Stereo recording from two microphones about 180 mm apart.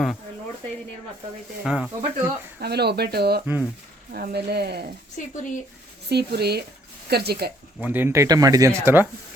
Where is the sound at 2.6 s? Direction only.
65° right (ahead or behind).